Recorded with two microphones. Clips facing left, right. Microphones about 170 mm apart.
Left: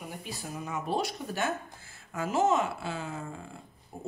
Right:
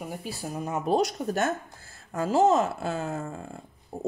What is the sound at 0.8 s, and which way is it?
A woman's voice, 40° right (ahead or behind).